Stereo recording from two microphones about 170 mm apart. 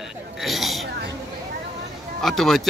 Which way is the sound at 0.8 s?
75° right (ahead or behind).